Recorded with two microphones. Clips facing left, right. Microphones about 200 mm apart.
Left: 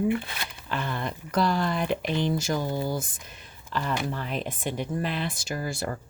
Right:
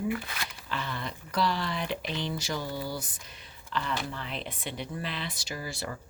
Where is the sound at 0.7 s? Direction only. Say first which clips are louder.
Left 5 dB; 50° left (ahead or behind).